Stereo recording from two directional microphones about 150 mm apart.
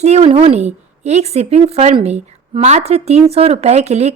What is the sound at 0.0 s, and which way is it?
A woman's voice, 45° right (ahead or behind).